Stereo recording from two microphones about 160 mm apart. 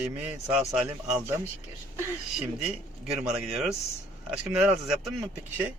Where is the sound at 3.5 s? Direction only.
Centre (ahead or behind).